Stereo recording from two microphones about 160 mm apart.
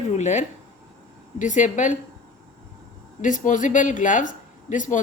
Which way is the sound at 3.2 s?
55° left (ahead or behind).